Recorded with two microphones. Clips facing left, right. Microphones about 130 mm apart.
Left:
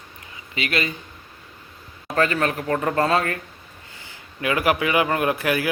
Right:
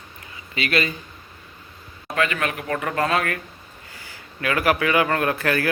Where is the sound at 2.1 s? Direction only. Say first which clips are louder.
Left 3 dB; 35° left (ahead or behind).